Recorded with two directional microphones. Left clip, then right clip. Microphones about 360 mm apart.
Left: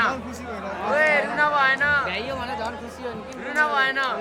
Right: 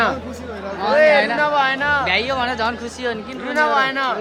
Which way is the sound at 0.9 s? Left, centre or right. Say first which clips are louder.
Right 6 dB; centre.